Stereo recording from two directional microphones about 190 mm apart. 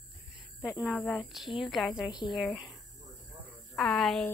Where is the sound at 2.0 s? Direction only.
25° left (ahead or behind).